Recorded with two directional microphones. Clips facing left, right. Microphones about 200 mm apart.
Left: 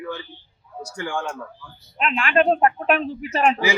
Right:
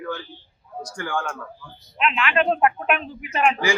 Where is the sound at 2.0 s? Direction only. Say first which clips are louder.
Left 2 dB; 40° left (ahead or behind).